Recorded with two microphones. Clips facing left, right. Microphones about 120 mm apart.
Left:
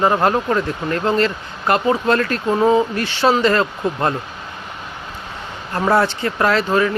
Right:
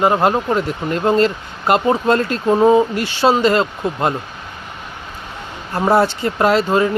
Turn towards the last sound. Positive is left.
turn(degrees=-25)  # may be behind; listen again after turning